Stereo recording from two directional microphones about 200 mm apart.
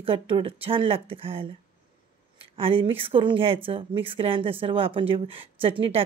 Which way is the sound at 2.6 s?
25° right (ahead or behind).